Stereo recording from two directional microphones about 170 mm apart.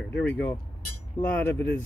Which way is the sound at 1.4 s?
10° left (ahead or behind).